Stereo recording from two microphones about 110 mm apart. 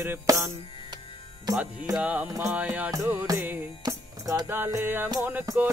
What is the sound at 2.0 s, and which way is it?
Music, 15° right (ahead or behind).